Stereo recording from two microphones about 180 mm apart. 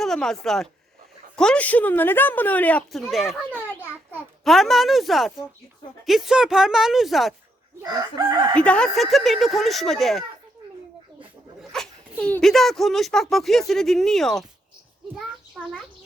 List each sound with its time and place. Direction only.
0.0 s speech: centre (ahead or behind)
7.8 s chicken: 20° right (ahead or behind)
8.6 s speech: 5° left (ahead or behind)
11.7 s speech: 5° left (ahead or behind)